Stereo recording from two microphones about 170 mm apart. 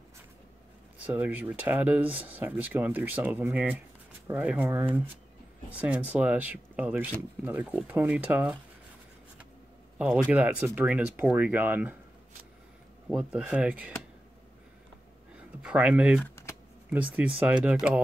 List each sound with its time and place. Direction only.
0.9 s speech: 10° right (ahead or behind)
9.9 s speech: 10° right (ahead or behind)
13.1 s speech: 5° right (ahead or behind)
15.3 s speech: 5° right (ahead or behind)
16.2 s typing: 15° left (ahead or behind)
16.9 s speech: 10° right (ahead or behind)